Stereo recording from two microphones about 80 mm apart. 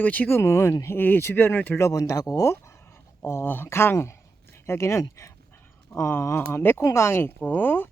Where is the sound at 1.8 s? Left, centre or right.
Left.